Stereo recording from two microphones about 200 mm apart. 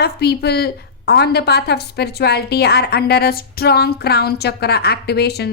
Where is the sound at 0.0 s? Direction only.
55° left (ahead or behind).